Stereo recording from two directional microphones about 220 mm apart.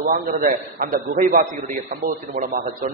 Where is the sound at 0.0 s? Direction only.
35° right (ahead or behind).